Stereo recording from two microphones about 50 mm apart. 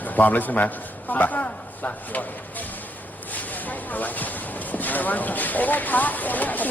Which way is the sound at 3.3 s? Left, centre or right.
Left.